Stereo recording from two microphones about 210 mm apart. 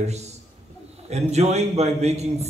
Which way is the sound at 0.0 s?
30° right (ahead or behind).